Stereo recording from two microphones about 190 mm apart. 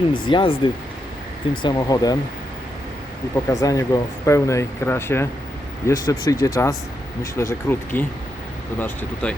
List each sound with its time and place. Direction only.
0.1 s speech: 25° left (ahead or behind)
3.3 s speech: 20° left (ahead or behind)